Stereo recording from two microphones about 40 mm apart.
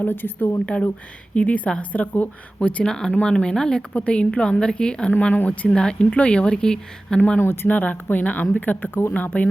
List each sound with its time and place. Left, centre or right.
0.0 s a woman's voice: left
0.6 s a woman's voice: left
2.8 s speech: centre
7.3 s speech: left
7.7 s speech: left